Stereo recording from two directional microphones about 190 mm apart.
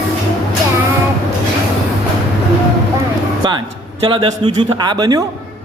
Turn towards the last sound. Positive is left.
turn(degrees=-20)  # may be behind; listen again after turning